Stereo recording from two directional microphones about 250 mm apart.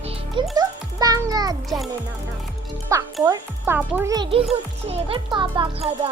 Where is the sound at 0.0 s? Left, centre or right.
Right.